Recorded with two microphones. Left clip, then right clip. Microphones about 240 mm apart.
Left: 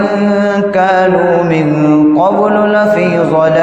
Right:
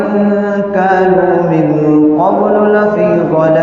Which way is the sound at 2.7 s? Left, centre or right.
Left.